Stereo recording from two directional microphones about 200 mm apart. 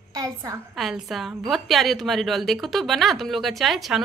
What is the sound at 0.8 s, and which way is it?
A woman's voice, centre (ahead or behind).